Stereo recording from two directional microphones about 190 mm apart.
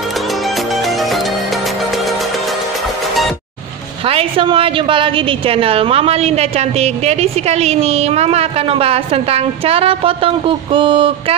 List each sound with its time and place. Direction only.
0.6 s music: centre (ahead or behind)
4.0 s a woman's voice: 30° right (ahead or behind)